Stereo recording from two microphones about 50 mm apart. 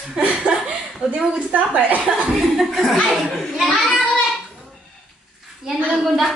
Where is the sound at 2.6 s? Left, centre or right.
Centre.